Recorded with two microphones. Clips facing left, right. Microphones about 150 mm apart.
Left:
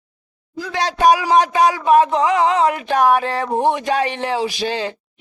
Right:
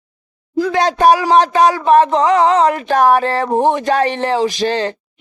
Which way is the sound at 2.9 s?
40° right (ahead or behind).